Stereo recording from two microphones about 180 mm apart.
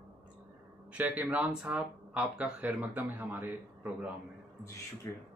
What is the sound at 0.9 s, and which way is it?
Speech, 10° right (ahead or behind).